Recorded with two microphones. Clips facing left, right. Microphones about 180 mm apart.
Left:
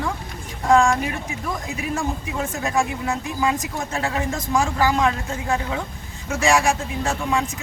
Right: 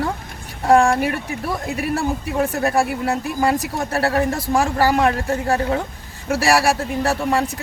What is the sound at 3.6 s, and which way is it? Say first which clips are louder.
Speech: right 5 dB; 65° right (ahead or behind).